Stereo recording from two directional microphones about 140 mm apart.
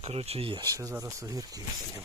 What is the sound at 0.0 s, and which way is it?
Speech, 45° right (ahead or behind).